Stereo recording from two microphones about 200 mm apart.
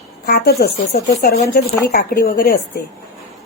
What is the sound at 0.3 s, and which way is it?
Speech, 50° left (ahead or behind).